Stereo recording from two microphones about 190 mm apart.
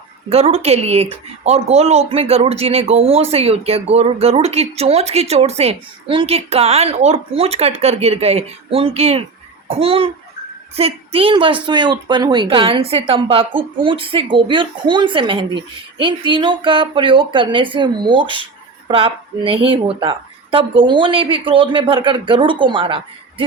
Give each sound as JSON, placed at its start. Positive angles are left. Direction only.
{"t": 0.3, "sound": "a woman's voice", "side_deg": -30}